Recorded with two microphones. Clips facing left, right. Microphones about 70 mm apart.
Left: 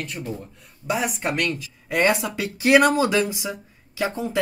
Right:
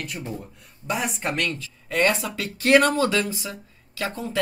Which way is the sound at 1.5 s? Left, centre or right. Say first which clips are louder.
Left 2 dB; centre.